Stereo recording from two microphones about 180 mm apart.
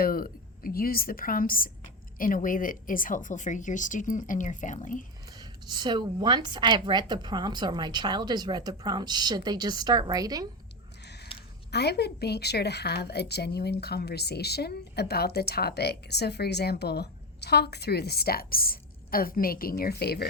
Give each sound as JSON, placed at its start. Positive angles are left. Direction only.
{"t": 0.0, "sound": "a woman's voice", "side_deg": 55}
{"t": 5.4, "sound": "a woman's voice", "side_deg": -25}
{"t": 11.0, "sound": "a sound", "side_deg": 70}
{"t": 11.3, "sound": "a woman's voice", "side_deg": 65}